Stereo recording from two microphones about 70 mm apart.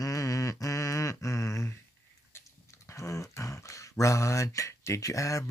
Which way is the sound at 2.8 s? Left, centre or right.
Left.